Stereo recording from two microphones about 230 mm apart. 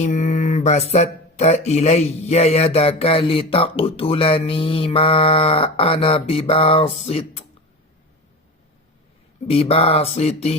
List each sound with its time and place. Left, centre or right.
0.0 s speech: left
9.5 s speech: left